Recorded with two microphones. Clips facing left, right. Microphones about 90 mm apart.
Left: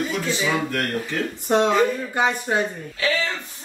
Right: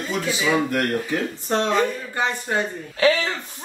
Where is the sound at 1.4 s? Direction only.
15° left (ahead or behind).